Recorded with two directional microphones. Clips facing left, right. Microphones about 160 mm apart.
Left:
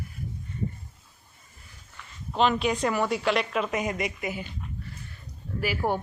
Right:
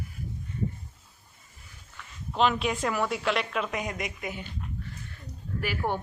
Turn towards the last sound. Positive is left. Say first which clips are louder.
# left 3 dB
turn(degrees=25)  # may be behind; listen again after turning